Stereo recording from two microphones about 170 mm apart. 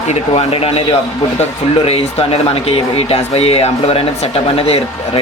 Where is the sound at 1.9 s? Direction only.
35° left (ahead or behind).